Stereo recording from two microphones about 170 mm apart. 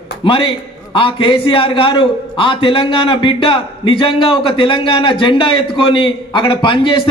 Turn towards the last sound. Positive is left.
turn(degrees=30)  # may be behind; listen again after turning